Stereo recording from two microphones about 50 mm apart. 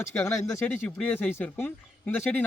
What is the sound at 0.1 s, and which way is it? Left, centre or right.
A man's voice, left.